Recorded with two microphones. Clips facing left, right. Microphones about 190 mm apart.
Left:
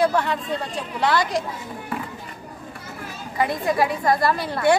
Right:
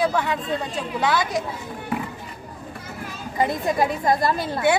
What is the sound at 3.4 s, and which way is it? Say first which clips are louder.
A woman's voice: even; 20° right (ahead or behind).